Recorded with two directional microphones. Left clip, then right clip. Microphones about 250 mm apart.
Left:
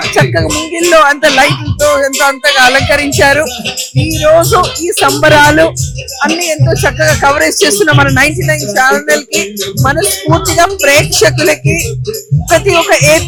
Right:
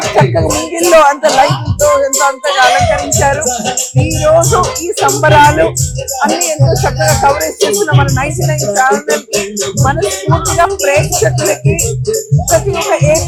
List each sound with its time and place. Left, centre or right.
0.2 s music: left
0.9 s speech: centre
2.7 s music: left
4.9 s speech: left
12.5 s speech: left